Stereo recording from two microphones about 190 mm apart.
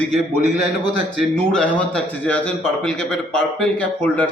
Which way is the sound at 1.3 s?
5° left (ahead or behind).